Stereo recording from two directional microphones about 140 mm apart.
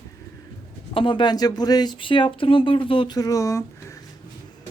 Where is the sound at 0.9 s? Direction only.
35° left (ahead or behind).